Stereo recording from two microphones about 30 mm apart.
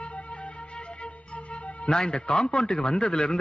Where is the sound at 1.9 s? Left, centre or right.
Left.